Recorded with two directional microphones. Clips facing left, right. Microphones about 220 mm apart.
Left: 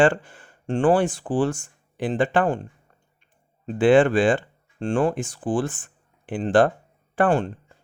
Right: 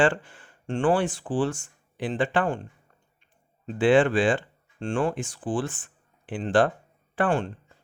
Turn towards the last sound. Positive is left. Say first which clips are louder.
# left 4 dB
turn(degrees=40)  # may be behind; listen again after turning